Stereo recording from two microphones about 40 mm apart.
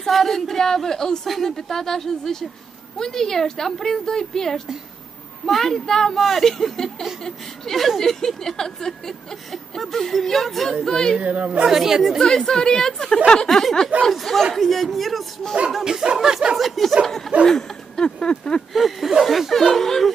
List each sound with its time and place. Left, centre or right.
0.1 s a sound: centre
5.5 s speech: centre
6.4 s a sound: centre
11.2 s a woman's voice: right
11.6 s speech: centre
12.2 s a sound: centre
13.5 s speech: centre
15.8 s speech: centre
16.5 s speech: centre
17.5 s speech: centre
18.7 s speech: centre